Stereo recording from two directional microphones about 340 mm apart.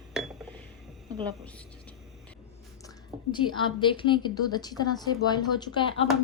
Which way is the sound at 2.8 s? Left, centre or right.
Centre.